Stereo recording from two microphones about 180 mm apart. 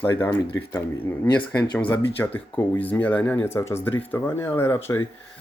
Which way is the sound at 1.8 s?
10° left (ahead or behind).